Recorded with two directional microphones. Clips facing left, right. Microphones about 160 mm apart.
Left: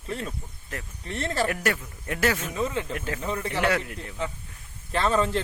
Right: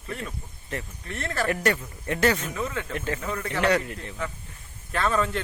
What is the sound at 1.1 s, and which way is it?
Speech, 30° left (ahead or behind).